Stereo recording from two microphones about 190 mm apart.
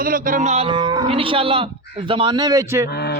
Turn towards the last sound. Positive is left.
turn(degrees=60)  # may be behind; listen again after turning